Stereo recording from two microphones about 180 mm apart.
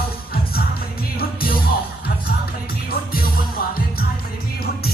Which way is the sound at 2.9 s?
55° left (ahead or behind).